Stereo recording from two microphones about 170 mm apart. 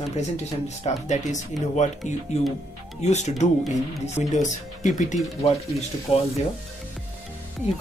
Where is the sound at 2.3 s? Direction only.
40° left (ahead or behind).